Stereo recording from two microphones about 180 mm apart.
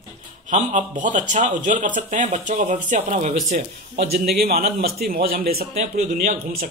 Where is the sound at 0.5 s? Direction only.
45° right (ahead or behind).